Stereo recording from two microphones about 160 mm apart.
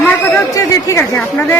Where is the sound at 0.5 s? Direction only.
15° left (ahead or behind).